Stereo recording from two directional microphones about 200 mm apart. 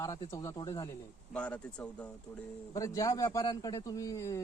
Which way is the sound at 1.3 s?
5° left (ahead or behind).